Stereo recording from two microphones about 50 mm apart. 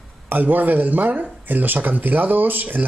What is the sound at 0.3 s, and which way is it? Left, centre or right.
Speech, right.